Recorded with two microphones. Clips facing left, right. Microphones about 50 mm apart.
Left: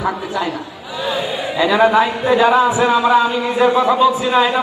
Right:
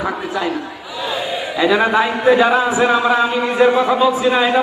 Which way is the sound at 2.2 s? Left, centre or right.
Centre.